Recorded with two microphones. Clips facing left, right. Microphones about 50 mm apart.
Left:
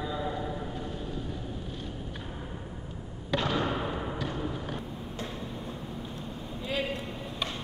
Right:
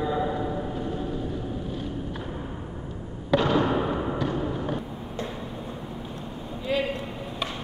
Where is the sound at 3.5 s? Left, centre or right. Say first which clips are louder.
Right 7 dB; right.